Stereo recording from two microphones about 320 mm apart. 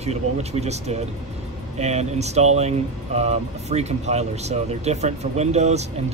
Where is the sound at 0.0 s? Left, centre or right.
Centre.